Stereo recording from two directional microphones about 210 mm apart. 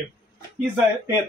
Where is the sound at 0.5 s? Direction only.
10° right (ahead or behind).